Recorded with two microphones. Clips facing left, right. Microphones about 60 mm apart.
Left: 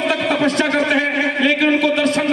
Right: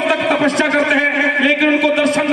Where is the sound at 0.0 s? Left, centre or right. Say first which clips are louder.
Right 3 dB; right.